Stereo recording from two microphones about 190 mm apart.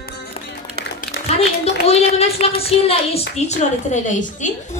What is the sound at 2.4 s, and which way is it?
A woman's voice, 30° left (ahead or behind).